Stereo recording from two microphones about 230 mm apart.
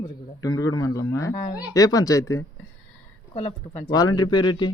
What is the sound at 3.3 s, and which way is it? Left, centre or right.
Speech, left.